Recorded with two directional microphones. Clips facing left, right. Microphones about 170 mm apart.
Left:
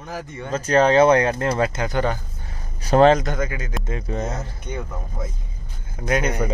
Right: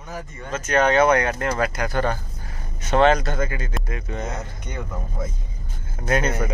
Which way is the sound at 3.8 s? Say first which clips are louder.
Left 3 dB; 30° left (ahead or behind).